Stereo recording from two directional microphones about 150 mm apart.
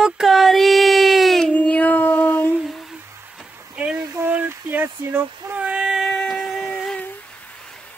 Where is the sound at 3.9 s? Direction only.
20° right (ahead or behind).